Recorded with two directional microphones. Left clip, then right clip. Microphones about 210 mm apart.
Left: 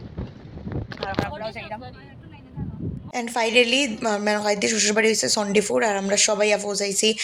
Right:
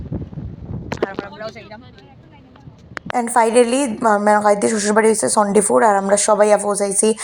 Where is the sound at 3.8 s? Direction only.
10° right (ahead or behind).